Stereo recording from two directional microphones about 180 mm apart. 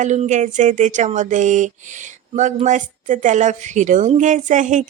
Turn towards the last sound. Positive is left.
turn(degrees=-45)  # may be behind; listen again after turning